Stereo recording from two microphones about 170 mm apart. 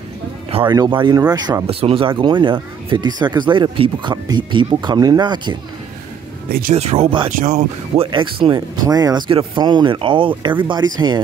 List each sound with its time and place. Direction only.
0.5 s music: 35° right (ahead or behind)
0.7 s speech: 25° right (ahead or behind)
1.7 s speech: 35° right (ahead or behind)
6.7 s speech: 40° right (ahead or behind)
7.3 s speech: 45° right (ahead or behind); by 11.1 s 25° right (ahead or behind)